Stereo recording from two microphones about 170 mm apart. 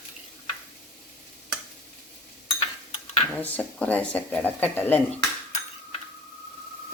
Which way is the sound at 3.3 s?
10° left (ahead or behind).